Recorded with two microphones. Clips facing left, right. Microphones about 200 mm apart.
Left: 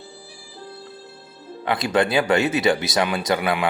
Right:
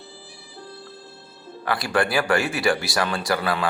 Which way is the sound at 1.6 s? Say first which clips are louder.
Left 3 dB; 20° left (ahead or behind).